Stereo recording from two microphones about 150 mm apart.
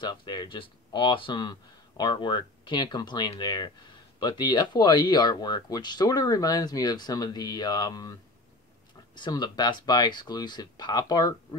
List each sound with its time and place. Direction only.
0.0 s speech: 30° left (ahead or behind)